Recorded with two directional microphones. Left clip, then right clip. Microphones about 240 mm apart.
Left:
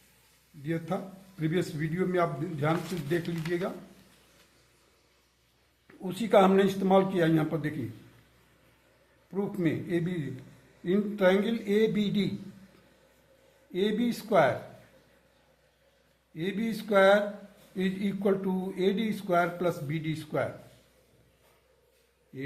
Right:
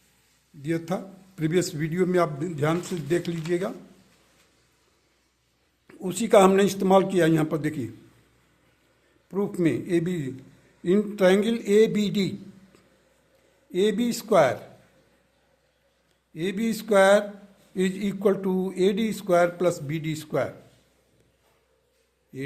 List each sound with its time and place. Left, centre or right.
0.6 s a man's voice: right
5.9 s a man's voice: right
9.3 s a man's voice: right
13.7 s a man's voice: right
16.3 s a man's voice: right